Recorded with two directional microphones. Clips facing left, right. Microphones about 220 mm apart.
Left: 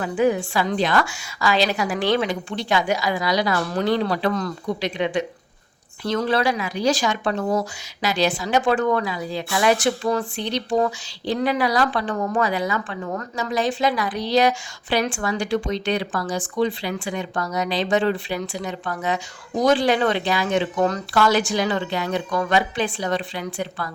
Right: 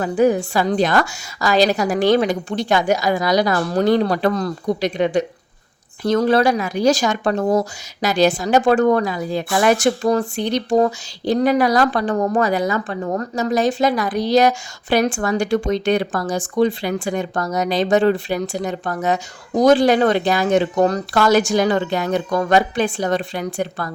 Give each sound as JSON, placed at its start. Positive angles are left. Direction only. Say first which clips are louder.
{"t": 0.0, "sound": "speech", "louder": "right 4 dB", "side_deg": -40}